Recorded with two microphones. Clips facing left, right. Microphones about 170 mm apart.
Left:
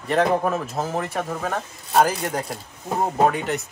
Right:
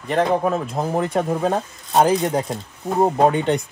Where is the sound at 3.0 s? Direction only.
25° right (ahead or behind).